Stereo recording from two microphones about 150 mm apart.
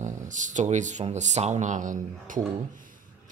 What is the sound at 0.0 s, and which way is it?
Speech, 55° right (ahead or behind).